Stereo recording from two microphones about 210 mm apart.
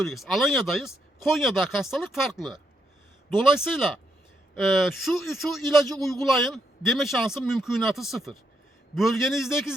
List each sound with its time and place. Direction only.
0.0 s speech: centre (ahead or behind)